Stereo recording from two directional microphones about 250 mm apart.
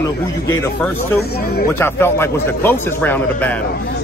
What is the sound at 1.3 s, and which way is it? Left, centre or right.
Speech, left.